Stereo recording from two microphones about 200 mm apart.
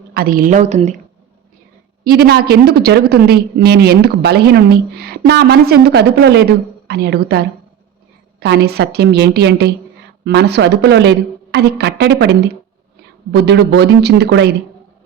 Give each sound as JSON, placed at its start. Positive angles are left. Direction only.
{"t": 0.1, "sound": "a woman's voice", "side_deg": -50}
{"t": 2.0, "sound": "a woman's voice", "side_deg": -55}